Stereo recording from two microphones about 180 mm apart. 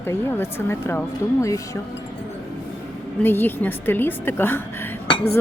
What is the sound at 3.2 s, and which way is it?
Speech, 10° left (ahead or behind).